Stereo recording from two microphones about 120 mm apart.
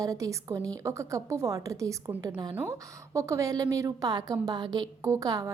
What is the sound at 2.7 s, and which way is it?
A woman's voice, 25° right (ahead or behind).